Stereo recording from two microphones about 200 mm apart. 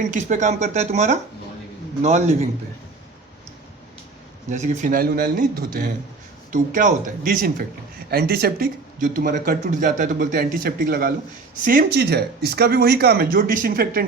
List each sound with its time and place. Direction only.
0.1 s speech: 35° right (ahead or behind)
4.4 s speech: 35° right (ahead or behind)